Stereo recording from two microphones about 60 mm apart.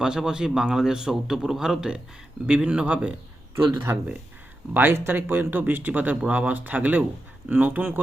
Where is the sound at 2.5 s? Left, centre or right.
Centre.